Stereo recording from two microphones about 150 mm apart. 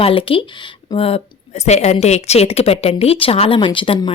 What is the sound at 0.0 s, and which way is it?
Speech, 35° left (ahead or behind).